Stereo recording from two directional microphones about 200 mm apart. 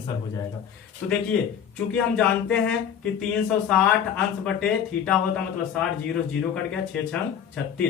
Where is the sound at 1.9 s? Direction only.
5° left (ahead or behind).